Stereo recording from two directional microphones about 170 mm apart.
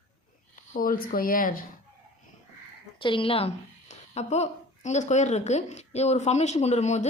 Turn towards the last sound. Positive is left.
turn(degrees=40)  # may be behind; listen again after turning